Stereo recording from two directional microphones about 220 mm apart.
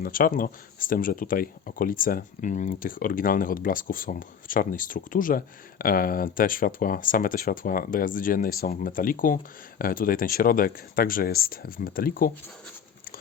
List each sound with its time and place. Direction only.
0.0 s speech: 40° left (ahead or behind)